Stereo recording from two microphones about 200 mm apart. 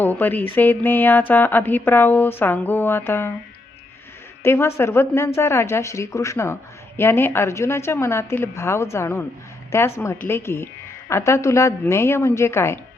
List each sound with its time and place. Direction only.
0.0 s speech: 10° left (ahead or behind)
4.4 s speech: 10° left (ahead or behind)